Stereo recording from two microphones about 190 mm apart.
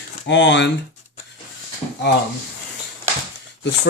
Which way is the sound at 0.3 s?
70° left (ahead or behind).